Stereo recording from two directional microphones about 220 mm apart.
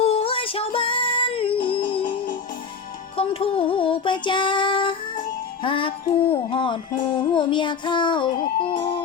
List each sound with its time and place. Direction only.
0.0 s music: 25° left (ahead or behind)
3.2 s music: 25° left (ahead or behind)
5.6 s child singing: 25° left (ahead or behind)